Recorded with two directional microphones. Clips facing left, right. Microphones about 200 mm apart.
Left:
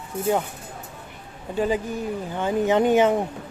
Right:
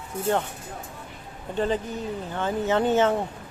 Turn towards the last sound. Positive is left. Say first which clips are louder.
# left 3 dB
turn(degrees=15)  # may be behind; listen again after turning